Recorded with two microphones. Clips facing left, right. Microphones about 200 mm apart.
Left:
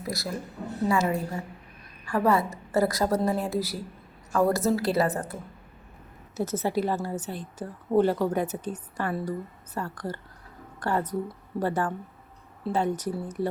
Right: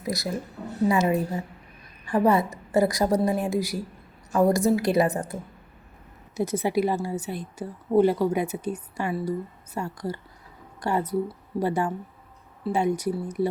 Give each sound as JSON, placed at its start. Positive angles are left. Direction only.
{"t": 0.0, "sound": "a woman's voice", "side_deg": -20}